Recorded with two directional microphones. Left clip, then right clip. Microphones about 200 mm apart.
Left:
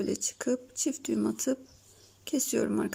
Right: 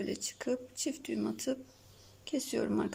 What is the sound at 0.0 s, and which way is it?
Speech, 15° left (ahead or behind).